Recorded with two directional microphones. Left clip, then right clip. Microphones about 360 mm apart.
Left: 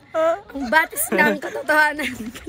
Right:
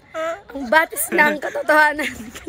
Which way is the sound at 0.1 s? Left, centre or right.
Centre.